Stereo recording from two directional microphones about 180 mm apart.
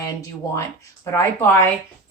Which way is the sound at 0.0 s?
15° left (ahead or behind).